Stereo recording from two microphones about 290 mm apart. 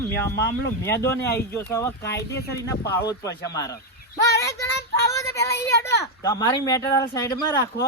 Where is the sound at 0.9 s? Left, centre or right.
Centre.